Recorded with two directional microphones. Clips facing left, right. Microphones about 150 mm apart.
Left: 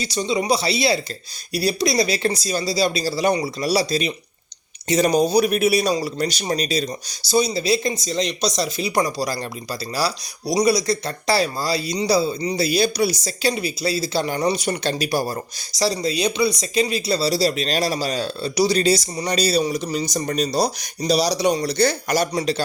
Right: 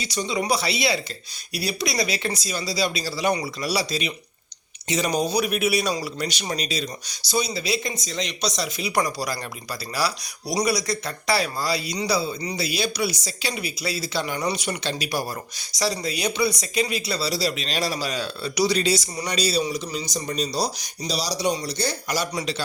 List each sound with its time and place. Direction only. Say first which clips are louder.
0.0 s speech: left 4 dB; 30° left (ahead or behind)
10.5 s speech: left 5 dB; 25° left (ahead or behind); by 22.3 s 55° left (ahead or behind)